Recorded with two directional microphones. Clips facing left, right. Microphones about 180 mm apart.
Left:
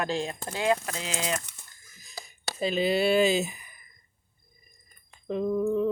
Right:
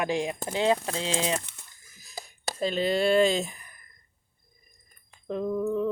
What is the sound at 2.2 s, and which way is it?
Speech, 5° left (ahead or behind).